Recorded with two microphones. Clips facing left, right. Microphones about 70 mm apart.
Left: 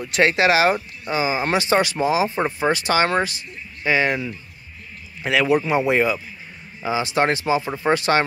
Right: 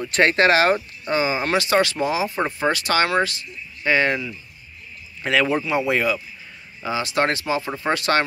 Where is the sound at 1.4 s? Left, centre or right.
Left.